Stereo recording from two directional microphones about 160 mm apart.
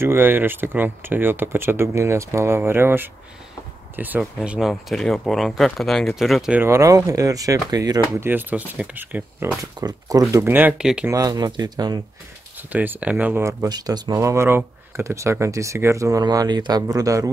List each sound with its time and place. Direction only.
0.0 s speech: 15° right (ahead or behind)
6.6 s speech: 20° right (ahead or behind)
8.3 s speech: 10° right (ahead or behind)
9.6 s speech: 25° right (ahead or behind)
10.3 s speech: 15° right (ahead or behind)
11.1 s speech: 25° right (ahead or behind)
12.7 s speech: 10° right (ahead or behind)